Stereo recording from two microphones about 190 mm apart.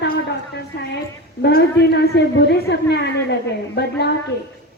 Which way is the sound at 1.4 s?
60° left (ahead or behind).